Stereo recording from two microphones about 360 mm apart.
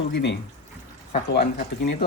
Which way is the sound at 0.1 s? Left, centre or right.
Left.